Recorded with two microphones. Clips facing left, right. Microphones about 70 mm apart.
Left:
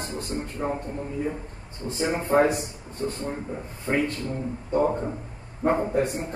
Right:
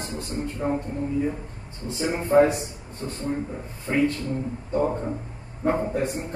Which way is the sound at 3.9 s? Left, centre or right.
Left.